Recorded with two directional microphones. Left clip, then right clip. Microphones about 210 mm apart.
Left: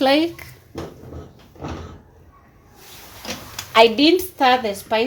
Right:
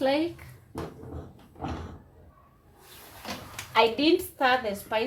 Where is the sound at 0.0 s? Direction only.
50° left (ahead or behind).